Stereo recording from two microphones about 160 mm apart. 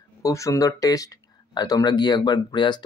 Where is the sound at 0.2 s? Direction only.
20° left (ahead or behind).